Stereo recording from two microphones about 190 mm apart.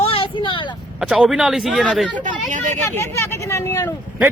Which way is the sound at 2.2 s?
40° right (ahead or behind).